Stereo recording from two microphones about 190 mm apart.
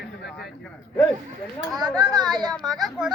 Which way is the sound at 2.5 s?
Centre (ahead or behind).